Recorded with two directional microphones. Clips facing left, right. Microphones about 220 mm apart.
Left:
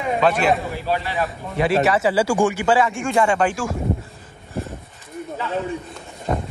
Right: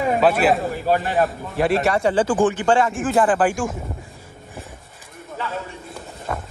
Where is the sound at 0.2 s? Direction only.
5° right (ahead or behind).